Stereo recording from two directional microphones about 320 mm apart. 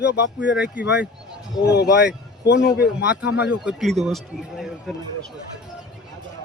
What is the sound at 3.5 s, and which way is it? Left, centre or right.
Speech, centre.